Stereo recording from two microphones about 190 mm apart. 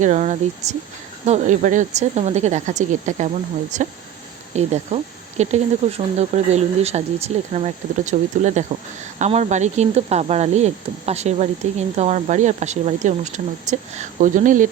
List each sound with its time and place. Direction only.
0.0 s speech: 40° right (ahead or behind)